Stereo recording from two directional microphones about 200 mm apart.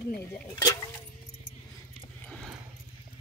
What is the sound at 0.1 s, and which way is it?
Speech, 10° left (ahead or behind).